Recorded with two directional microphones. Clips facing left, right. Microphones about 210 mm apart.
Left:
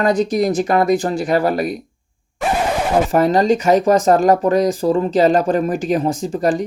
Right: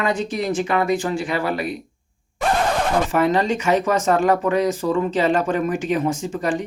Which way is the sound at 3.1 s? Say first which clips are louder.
Left 5 dB; 40° left (ahead or behind).